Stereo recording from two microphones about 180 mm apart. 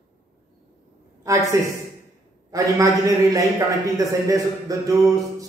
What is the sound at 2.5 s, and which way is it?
Speech, 20° right (ahead or behind).